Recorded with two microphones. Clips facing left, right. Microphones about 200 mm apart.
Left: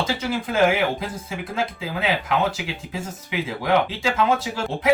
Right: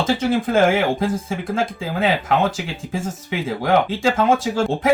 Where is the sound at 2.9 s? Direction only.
45° right (ahead or behind).